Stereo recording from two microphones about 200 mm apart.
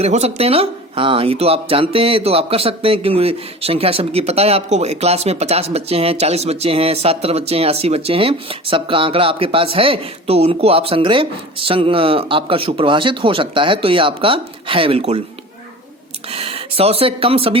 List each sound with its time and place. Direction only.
0.0 s speech: 30° right (ahead or behind)
16.3 s speech: 30° right (ahead or behind)